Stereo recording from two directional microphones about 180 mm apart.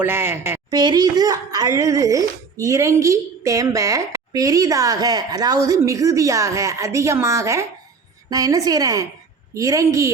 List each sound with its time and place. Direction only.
0.0 s a woman's voice: 15° right (ahead or behind)